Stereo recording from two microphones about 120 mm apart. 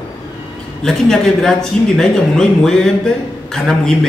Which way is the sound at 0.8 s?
5° left (ahead or behind).